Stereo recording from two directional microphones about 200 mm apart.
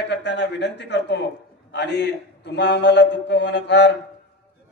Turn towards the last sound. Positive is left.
turn(degrees=60)  # may be behind; listen again after turning